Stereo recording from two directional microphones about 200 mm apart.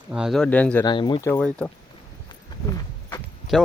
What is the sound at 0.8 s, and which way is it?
Speech, 20° left (ahead or behind).